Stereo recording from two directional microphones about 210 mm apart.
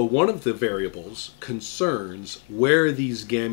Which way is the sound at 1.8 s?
45° left (ahead or behind).